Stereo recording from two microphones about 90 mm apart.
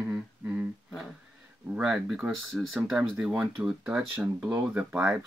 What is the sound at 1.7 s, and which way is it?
Speech, 10° right (ahead or behind).